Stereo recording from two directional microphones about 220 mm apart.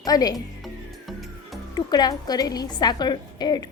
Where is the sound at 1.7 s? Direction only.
20° left (ahead or behind).